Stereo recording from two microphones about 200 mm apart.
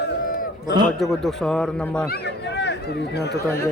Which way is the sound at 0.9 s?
Centre (ahead or behind).